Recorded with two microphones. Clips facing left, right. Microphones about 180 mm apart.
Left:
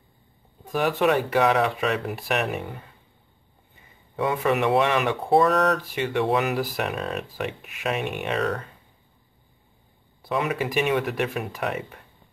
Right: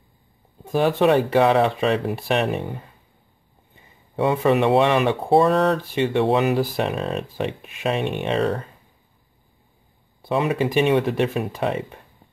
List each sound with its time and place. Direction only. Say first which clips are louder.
0.7 s speech: right 4 dB; 30° right (ahead or behind)
3.8 s speech: right 5 dB; 30° right (ahead or behind)
10.2 s speech: right 4 dB; 30° right (ahead or behind)